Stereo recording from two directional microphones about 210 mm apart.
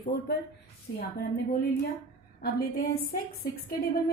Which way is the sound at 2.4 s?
50° left (ahead or behind).